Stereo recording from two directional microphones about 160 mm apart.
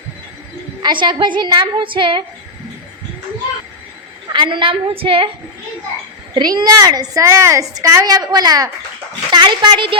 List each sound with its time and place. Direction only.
0.8 s a woman's voice: 25° right (ahead or behind)
4.3 s a woman's voice: 30° right (ahead or behind)
6.3 s a woman's voice: 25° right (ahead or behind)